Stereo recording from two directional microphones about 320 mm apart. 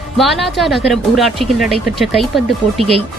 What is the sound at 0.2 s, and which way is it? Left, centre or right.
Speech, centre.